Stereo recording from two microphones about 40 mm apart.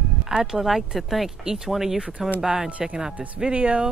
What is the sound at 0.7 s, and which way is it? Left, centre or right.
Speech, centre.